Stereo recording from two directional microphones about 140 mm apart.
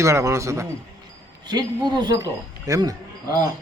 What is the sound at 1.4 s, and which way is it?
Speech, 30° right (ahead or behind).